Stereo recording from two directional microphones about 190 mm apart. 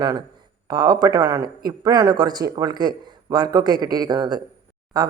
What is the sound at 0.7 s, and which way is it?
A man's voice, 20° right (ahead or behind).